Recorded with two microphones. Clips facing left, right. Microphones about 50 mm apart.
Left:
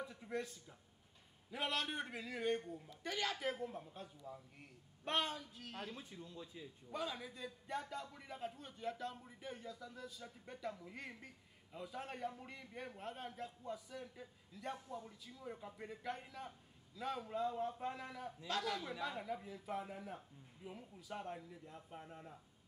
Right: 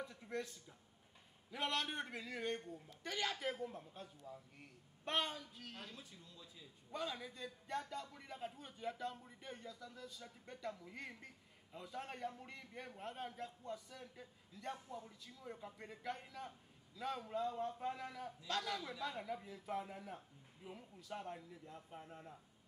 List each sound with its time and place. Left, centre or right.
0.0 s a sound: centre
1.5 s a man's voice: centre
5.9 s speech: left
6.9 s a man's voice: centre